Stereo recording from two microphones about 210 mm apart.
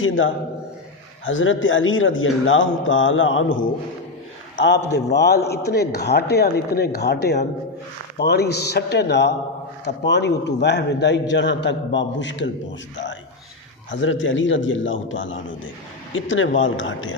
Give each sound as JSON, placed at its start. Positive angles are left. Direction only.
{"t": 0.0, "sound": "a man's voice", "side_deg": 65}
{"t": 13.9, "sound": "a man's voice", "side_deg": 65}